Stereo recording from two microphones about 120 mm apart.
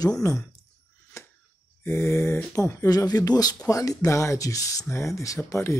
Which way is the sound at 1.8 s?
20° left (ahead or behind).